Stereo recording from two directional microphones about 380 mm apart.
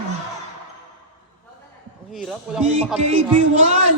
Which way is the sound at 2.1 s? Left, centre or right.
Centre.